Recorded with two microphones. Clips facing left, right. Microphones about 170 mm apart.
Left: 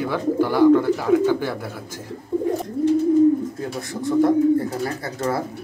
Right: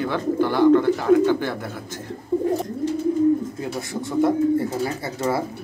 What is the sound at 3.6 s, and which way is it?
Speech, centre (ahead or behind).